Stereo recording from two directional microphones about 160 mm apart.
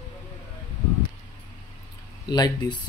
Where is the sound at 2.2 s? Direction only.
25° left (ahead or behind).